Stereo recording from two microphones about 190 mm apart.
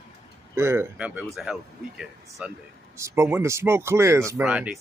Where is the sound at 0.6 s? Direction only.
15° right (ahead or behind).